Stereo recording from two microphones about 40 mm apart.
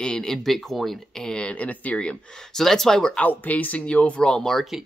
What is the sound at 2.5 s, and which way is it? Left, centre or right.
Speech, centre.